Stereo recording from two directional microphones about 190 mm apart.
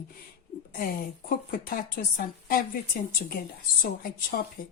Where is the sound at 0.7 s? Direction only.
50° left (ahead or behind).